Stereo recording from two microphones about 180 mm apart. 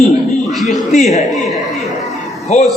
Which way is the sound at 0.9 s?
40° left (ahead or behind).